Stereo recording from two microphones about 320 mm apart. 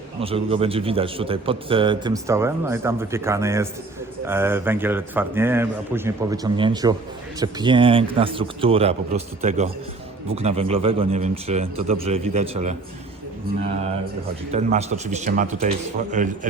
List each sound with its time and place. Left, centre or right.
0.2 s a man's voice: centre
14.5 s a man's voice: right